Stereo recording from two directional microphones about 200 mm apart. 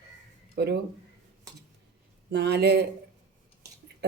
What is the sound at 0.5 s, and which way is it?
Speech, 55° right (ahead or behind).